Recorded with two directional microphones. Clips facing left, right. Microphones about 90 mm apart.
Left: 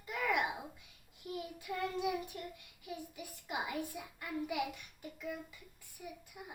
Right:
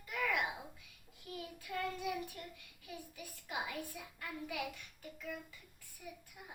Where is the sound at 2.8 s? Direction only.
20° left (ahead or behind).